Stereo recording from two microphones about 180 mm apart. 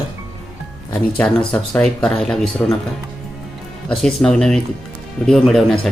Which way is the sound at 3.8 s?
5° left (ahead or behind).